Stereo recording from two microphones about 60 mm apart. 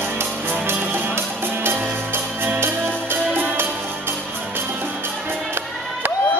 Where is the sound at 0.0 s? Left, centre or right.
Right.